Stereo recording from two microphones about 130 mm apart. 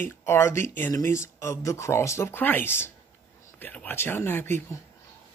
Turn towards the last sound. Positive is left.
turn(degrees=20)  # may be behind; listen again after turning